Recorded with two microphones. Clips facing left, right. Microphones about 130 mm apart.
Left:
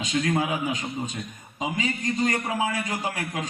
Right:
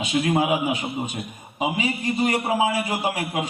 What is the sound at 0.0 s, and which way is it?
A man's voice, 15° right (ahead or behind).